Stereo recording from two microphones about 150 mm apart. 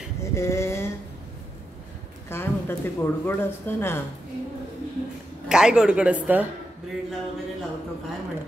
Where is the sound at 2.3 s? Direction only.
15° left (ahead or behind).